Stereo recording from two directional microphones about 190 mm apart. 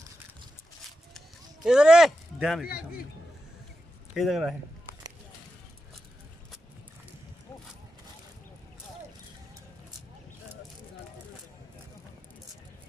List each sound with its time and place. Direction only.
1.1 s a sound: 5° right (ahead or behind)
2.7 s a man's voice: 50° left (ahead or behind)
4.1 s speech: centre (ahead or behind)